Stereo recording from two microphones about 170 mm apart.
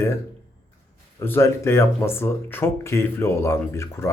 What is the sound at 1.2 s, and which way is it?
Speech, 15° left (ahead or behind).